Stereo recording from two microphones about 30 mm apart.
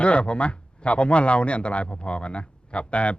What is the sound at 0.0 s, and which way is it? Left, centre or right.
Speech, left.